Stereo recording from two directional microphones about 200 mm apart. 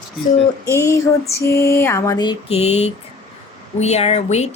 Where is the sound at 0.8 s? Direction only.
15° left (ahead or behind); by 2.9 s 30° left (ahead or behind).